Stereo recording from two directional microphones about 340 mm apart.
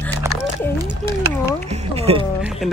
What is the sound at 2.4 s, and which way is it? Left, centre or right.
Speech, centre.